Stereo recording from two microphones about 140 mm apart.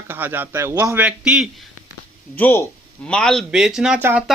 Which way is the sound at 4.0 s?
15° right (ahead or behind).